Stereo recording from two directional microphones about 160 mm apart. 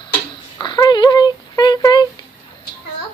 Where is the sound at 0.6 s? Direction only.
25° left (ahead or behind).